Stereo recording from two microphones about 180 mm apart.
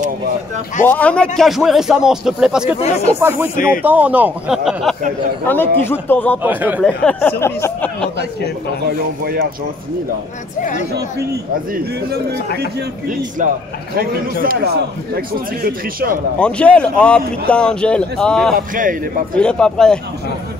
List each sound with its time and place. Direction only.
0.8 s speech: 10° left (ahead or behind)
2.8 s speech: 35° left (ahead or behind)
3.2 s speech: 10° right (ahead or behind)
5.5 s speech: 10° left (ahead or behind)
6.4 s speech: 10° right (ahead or behind)
6.8 s speech: 10° left (ahead or behind)
8.8 s speech: 60° right (ahead or behind)
11.7 s speech: 60° right (ahead or behind)
13.9 s speech: 55° right (ahead or behind)
16.3 s speech: 5° left (ahead or behind)
18.5 s speech: 50° right (ahead or behind)
19.3 s speech: 5° left (ahead or behind)